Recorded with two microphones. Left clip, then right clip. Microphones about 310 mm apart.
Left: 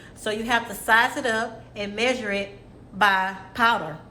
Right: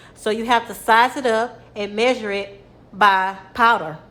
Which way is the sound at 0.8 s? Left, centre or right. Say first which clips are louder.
Right 5 dB; centre.